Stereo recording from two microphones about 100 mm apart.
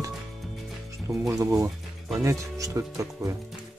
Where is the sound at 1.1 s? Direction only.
40° right (ahead or behind).